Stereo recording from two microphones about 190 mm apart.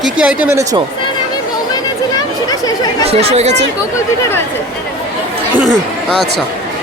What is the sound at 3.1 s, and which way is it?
Speech, 35° right (ahead or behind).